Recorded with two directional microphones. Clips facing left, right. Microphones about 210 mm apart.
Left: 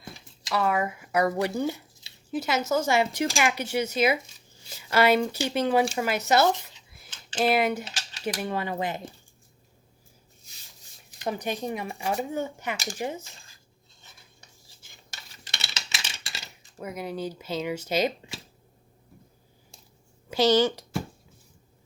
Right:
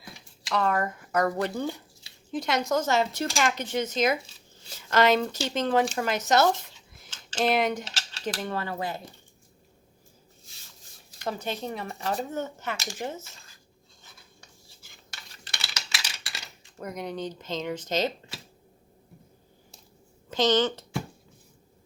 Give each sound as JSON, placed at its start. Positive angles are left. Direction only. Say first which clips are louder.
{"t": 0.4, "sound": "speech", "louder": "left 1 dB", "side_deg": 5}
{"t": 11.2, "sound": "speech", "louder": "left 2 dB", "side_deg": 15}
{"t": 15.5, "sound": "a sound", "louder": "even", "side_deg": 25}
{"t": 16.7, "sound": "speech", "louder": "left 1 dB", "side_deg": 5}
{"t": 20.3, "sound": "speech", "louder": "left 2 dB", "side_deg": 10}